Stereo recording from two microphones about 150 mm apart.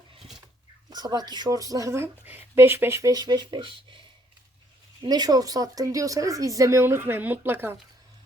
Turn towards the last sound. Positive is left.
turn(degrees=-15)  # may be behind; listen again after turning